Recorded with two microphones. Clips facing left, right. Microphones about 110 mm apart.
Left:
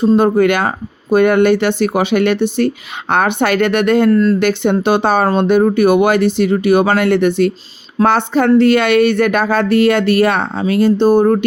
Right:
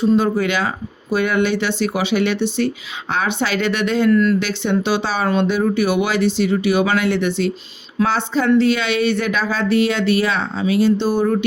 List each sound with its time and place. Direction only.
0.2 s speech: 55° left (ahead or behind)
4.1 s speech: 35° left (ahead or behind)
4.4 s a woman's voice: 55° left (ahead or behind)